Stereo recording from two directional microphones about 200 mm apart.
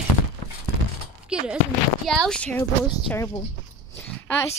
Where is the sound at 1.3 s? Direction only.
5° right (ahead or behind).